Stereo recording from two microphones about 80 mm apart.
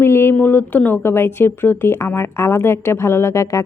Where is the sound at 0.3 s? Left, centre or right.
Left.